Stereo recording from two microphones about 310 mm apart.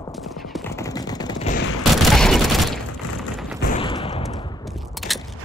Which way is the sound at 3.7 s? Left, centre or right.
Centre.